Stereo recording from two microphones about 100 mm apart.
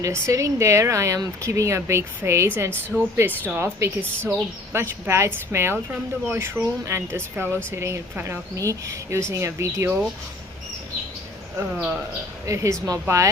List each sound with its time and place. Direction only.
0.0 s a woman's voice: 30° right (ahead or behind)
7.4 s speech: 20° left (ahead or behind)
7.7 s a woman's voice: 30° right (ahead or behind)
11.5 s speech: 15° right (ahead or behind)
12.5 s speech: 35° right (ahead or behind)